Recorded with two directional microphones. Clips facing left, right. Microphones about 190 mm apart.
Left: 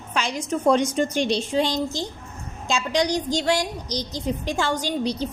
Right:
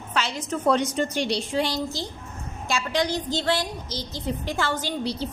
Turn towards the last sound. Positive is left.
turn(degrees=15)  # may be behind; listen again after turning